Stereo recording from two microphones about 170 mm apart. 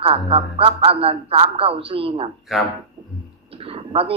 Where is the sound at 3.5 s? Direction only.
35° right (ahead or behind).